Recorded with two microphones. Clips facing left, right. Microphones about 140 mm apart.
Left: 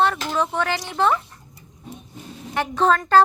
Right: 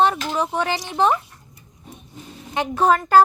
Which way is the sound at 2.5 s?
15° right (ahead or behind).